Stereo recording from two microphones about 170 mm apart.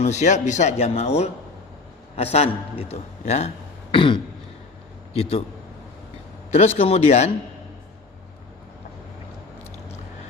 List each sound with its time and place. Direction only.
0.0 s a man's voice: 45° left (ahead or behind)
3.9 s throat clearing: 30° left (ahead or behind)
5.1 s a man's voice: 35° left (ahead or behind)
6.5 s a man's voice: 40° left (ahead or behind)